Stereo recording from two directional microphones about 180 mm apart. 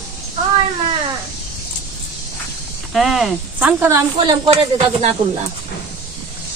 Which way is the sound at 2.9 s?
Centre (ahead or behind).